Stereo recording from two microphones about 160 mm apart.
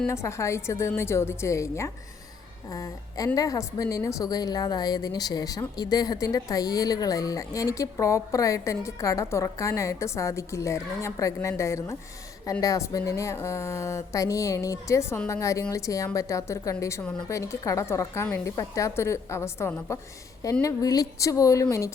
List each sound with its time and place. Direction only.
0.1 s a woman's voice: 20° left (ahead or behind)
17.2 s a woman's voice: 20° left (ahead or behind)